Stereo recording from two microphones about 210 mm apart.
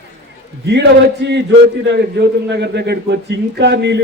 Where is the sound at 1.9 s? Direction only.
55° right (ahead or behind).